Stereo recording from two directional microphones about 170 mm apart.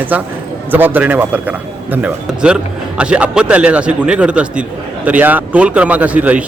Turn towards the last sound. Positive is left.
turn(degrees=-10)  # may be behind; listen again after turning